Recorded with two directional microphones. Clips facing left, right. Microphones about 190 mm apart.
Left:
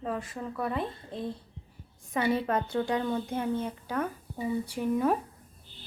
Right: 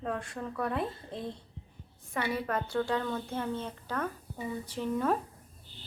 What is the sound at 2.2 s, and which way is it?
A woman's voice, 25° left (ahead or behind).